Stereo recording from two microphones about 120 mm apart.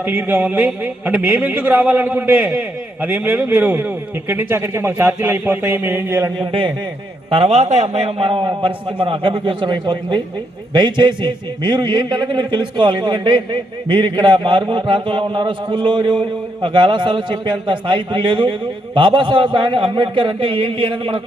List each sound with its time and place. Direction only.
0.0 s a man's voice: 15° right (ahead or behind)
6.4 s a man's voice: 45° right (ahead or behind)